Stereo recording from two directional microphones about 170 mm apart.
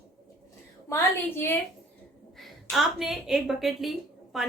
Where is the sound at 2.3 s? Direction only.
Centre (ahead or behind).